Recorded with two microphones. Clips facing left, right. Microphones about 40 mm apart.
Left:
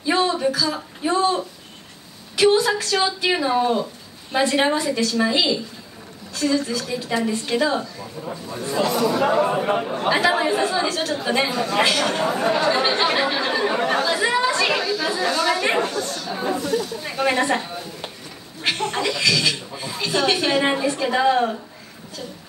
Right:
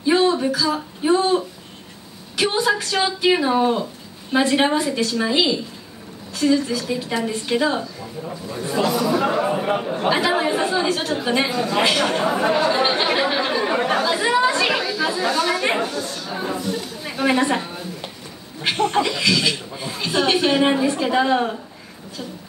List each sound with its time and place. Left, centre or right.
0.2 s speech: centre
2.5 s speech: centre
6.4 s a woman's voice: right
7.1 s speech: centre
12.0 s a woman's voice: right
14.3 s chatter: centre
16.2 s a woman's voice: centre
18.9 s speech: centre
20.6 s speech: centre